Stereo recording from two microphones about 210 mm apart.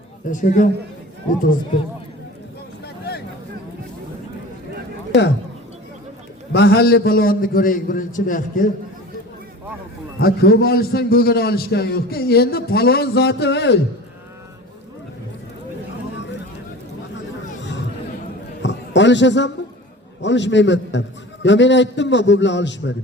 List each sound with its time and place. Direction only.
0.3 s a man's voice: 40° left (ahead or behind)
2.8 s a sound: 50° left (ahead or behind)
6.5 s a man's voice: 50° left (ahead or behind)
10.2 s a man's voice: 45° left (ahead or behind)
17.6 s chatter: 55° left (ahead or behind)
18.6 s a sound: 60° left (ahead or behind)
20.2 s a man's voice: 60° left (ahead or behind)